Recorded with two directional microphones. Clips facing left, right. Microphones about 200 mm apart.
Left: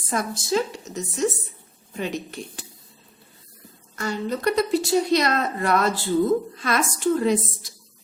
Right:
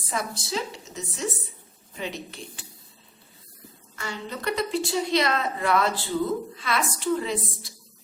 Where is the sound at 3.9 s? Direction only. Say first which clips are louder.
Left 8 dB; 40° left (ahead or behind).